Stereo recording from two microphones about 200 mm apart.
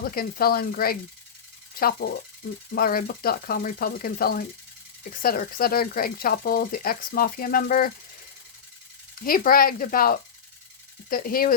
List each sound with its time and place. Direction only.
0.0 s speech: 45° left (ahead or behind)
9.2 s speech: 45° left (ahead or behind)